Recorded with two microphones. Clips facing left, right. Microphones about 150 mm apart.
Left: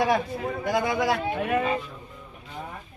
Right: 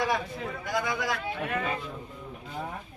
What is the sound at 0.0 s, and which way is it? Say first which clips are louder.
A man's voice: left 5 dB; 55° left (ahead or behind).